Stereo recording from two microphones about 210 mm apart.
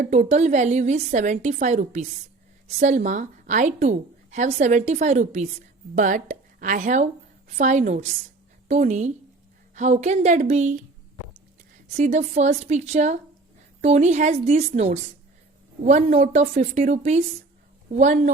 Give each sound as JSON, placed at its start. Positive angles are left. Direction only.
{"t": 0.0, "sound": "a woman's voice", "side_deg": -35}
{"t": 11.9, "sound": "a woman's voice", "side_deg": -30}